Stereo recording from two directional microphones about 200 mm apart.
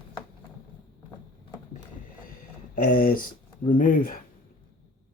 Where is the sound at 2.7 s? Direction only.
45° left (ahead or behind).